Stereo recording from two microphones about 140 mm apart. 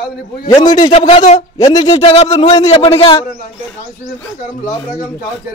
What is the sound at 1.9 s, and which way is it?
A man's voice, 45° left (ahead or behind).